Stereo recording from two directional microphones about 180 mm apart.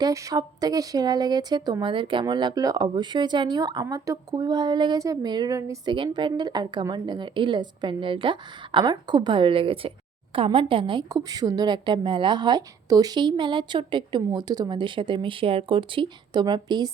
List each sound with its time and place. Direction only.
0.0 s speech: 20° right (ahead or behind)